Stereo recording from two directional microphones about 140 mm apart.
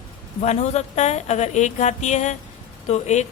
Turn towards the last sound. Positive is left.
turn(degrees=55)  # may be behind; listen again after turning